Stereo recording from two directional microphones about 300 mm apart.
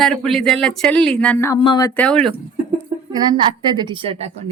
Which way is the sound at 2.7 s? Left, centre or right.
Centre.